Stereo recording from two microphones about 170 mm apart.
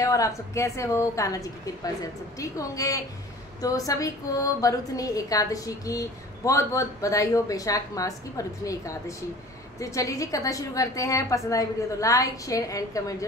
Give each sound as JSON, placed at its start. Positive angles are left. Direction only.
{"t": 0.0, "sound": "a woman's voice", "side_deg": 20}